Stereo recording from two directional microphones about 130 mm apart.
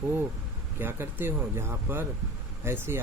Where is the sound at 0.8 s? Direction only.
15° right (ahead or behind).